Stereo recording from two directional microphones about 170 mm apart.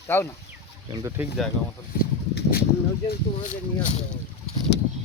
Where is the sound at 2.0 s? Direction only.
65° left (ahead or behind).